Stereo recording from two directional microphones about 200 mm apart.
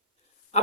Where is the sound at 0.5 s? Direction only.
35° left (ahead or behind).